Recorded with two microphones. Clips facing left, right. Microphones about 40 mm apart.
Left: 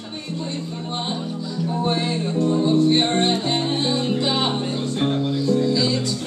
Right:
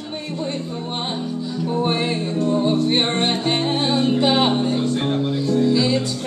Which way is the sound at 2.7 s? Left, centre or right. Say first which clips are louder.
Left 2 dB; right.